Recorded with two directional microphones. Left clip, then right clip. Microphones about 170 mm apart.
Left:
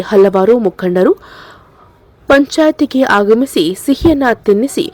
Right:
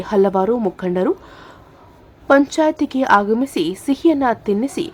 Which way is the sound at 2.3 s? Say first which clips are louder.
Left 6 dB; 25° left (ahead or behind).